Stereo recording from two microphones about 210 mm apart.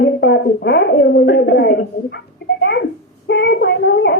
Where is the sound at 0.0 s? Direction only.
55° left (ahead or behind).